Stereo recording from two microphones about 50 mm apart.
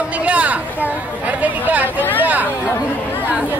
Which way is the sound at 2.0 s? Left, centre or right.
Left.